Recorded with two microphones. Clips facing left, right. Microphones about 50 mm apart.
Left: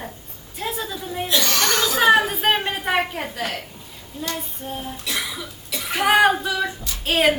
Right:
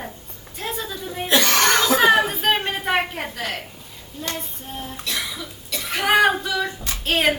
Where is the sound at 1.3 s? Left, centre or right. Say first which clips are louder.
Right 4 dB; right.